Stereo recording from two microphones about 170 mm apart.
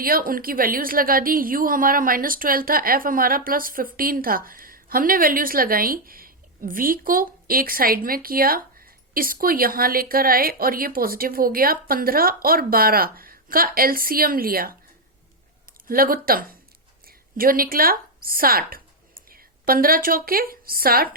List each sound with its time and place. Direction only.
0.0 s a woman's voice: 55° right (ahead or behind)
15.9 s a woman's voice: 60° right (ahead or behind)